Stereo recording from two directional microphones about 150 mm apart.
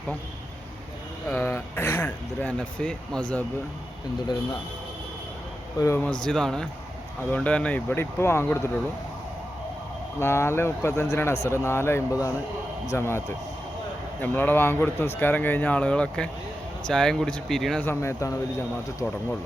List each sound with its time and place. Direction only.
1.3 s speech: 15° left (ahead or behind)
5.8 s speech: 20° left (ahead or behind)
6.2 s speech: 5° left (ahead or behind)
10.2 s speech: 15° left (ahead or behind)
17.8 s speech: 20° left (ahead or behind)